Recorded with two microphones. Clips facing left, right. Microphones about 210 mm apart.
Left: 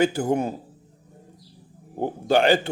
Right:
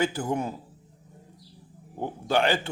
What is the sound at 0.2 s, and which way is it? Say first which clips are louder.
Speech: left 6 dB; 35° left (ahead or behind).